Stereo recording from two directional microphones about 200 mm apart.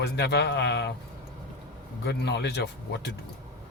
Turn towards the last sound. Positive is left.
turn(degrees=55)  # may be behind; listen again after turning